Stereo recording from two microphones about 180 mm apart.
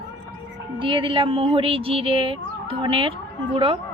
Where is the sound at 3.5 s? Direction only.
30° right (ahead or behind).